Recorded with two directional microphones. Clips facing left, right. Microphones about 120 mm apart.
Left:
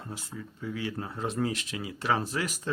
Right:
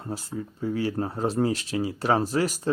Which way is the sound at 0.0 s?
40° right (ahead or behind).